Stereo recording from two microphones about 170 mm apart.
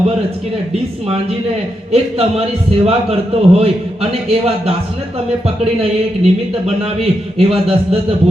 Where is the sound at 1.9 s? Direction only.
35° right (ahead or behind).